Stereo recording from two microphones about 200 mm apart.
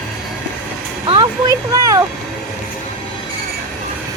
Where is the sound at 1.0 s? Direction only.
20° right (ahead or behind).